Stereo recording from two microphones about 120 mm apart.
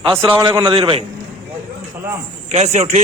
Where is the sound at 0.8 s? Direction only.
55° right (ahead or behind).